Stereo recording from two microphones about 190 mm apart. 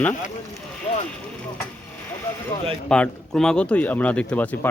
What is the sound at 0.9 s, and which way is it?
Clip-clop, 30° left (ahead or behind).